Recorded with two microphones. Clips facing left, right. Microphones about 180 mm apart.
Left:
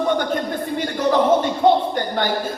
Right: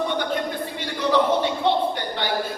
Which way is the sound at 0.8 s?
45° left (ahead or behind).